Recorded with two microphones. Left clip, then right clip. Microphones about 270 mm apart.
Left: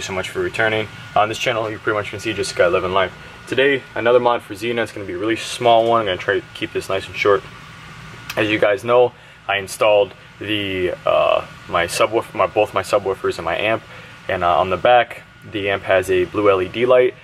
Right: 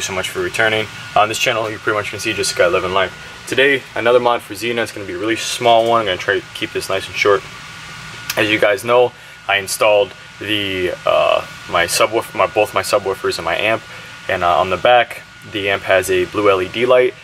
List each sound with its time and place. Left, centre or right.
0.0 s speech: centre
13.0 s speech: centre
13.3 s speech: centre